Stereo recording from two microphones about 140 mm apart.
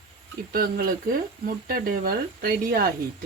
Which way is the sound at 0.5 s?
90° right.